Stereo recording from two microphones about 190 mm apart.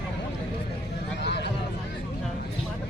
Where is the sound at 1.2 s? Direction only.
65° left (ahead or behind).